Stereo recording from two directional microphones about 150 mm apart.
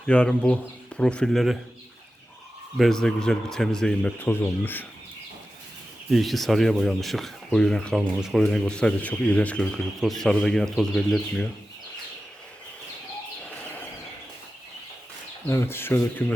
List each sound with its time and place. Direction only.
0.1 s speech: 5° left (ahead or behind)
2.7 s speech: centre (ahead or behind)
6.1 s speech: centre (ahead or behind)
15.4 s speech: 15° left (ahead or behind)